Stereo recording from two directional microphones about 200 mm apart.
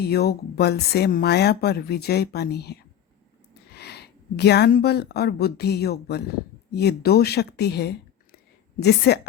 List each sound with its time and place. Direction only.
0.0 s speech: 50° left (ahead or behind)
3.8 s a woman's voice: 55° left (ahead or behind)